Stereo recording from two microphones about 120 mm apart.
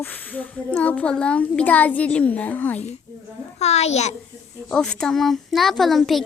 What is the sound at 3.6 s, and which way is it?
Speech, 65° left (ahead or behind).